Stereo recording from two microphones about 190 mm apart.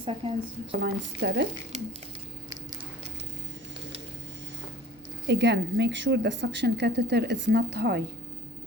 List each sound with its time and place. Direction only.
0.0 s speech: 30° right (ahead or behind)
0.7 s a woman's voice: 65° right (ahead or behind)
5.3 s a woman's voice: 65° right (ahead or behind)